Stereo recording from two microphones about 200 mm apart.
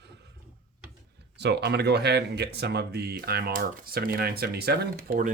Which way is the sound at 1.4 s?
60° right (ahead or behind).